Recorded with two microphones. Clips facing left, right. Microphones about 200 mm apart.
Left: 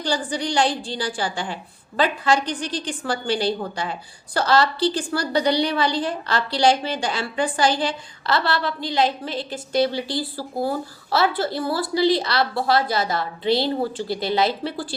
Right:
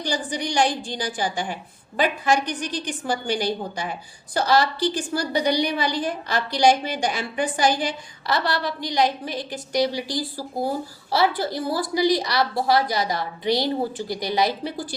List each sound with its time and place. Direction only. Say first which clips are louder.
0.0 s a woman's voice: left 2 dB; 15° right (ahead or behind)